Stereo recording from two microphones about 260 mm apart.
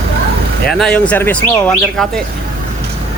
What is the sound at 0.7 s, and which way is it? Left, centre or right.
Speech, centre.